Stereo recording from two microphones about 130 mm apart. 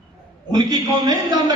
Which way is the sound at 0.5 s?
30° right (ahead or behind).